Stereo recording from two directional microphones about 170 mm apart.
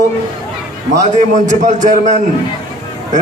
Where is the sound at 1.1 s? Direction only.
45° right (ahead or behind).